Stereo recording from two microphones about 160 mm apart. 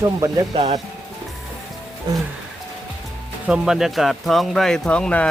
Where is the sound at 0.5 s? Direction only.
45° right (ahead or behind).